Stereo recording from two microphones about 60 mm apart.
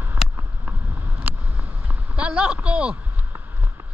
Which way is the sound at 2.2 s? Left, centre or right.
Centre.